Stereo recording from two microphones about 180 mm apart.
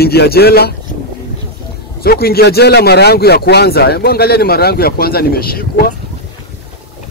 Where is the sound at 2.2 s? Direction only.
60° left (ahead or behind).